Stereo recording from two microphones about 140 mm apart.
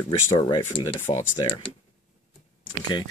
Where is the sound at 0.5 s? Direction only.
35° left (ahead or behind).